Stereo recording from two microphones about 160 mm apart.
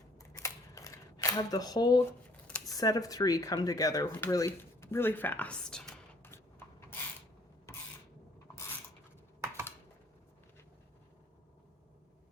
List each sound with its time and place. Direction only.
0.2 s camera: 20° left (ahead or behind)
2.6 s speech: 20° left (ahead or behind); by 5.9 s 5° left (ahead or behind)
6.2 s rub: 15° left (ahead or behind)
7.7 s a sound: 15° left (ahead or behind)